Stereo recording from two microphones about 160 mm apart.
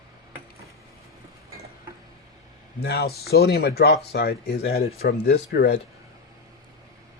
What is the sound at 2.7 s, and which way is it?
Speech, 80° left.